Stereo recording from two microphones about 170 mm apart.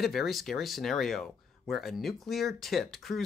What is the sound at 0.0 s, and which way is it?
Speech, centre (ahead or behind).